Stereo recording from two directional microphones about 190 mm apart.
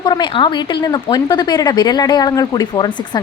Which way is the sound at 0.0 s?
25° left (ahead or behind).